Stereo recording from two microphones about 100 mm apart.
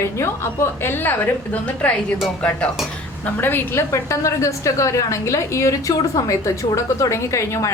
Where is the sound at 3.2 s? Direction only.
20° left (ahead or behind).